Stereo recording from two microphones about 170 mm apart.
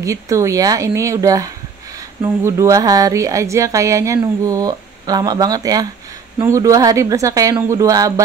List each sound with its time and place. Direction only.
0.0 s a woman's voice: 20° right (ahead or behind)